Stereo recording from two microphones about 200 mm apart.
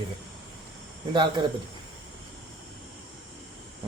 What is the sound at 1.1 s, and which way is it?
Speech, 25° right (ahead or behind).